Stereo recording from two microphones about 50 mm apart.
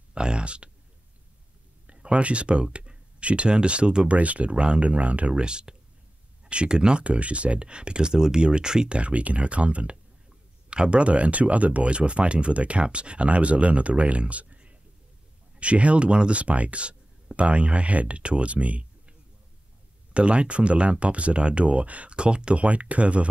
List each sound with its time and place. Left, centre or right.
0.1 s a sound: centre
1.9 s speech: right
20.2 s speech: right